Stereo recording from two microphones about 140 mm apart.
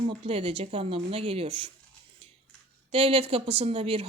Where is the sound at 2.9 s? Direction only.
40° right (ahead or behind).